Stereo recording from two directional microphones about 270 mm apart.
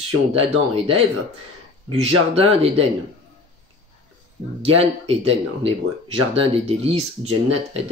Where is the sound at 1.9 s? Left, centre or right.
Right.